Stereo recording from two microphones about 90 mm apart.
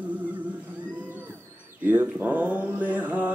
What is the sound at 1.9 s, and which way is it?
Mantra, 20° right (ahead or behind).